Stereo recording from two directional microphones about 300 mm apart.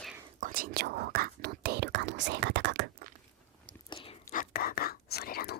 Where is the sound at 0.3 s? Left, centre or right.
Right.